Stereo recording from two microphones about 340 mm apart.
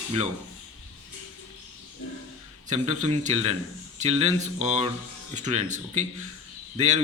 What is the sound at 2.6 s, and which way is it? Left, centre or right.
A man's voice, right.